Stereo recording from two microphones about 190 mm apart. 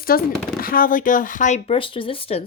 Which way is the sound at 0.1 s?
50° left (ahead or behind).